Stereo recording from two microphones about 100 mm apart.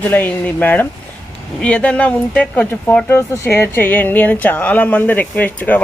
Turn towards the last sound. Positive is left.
turn(degrees=15)  # may be behind; listen again after turning